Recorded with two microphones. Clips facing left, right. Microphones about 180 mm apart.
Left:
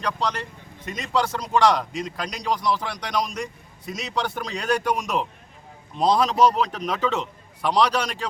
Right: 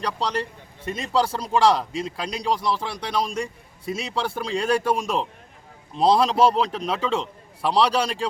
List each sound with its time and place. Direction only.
0.0 s a man's voice: 35° right (ahead or behind)